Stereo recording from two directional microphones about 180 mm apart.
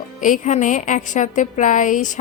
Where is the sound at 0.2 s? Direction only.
45° left (ahead or behind).